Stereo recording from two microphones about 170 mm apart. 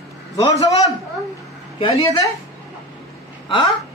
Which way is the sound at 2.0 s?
20° left (ahead or behind).